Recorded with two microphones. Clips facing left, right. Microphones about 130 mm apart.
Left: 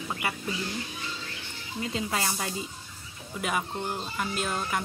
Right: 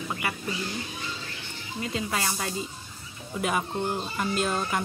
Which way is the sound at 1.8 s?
20° left (ahead or behind).